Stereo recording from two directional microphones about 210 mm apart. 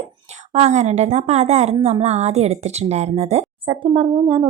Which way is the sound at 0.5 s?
30° right (ahead or behind).